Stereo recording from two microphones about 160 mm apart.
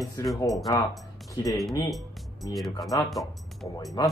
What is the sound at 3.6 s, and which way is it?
Speech, 35° left (ahead or behind).